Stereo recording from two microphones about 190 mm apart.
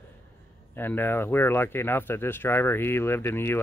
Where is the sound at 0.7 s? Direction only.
10° left (ahead or behind).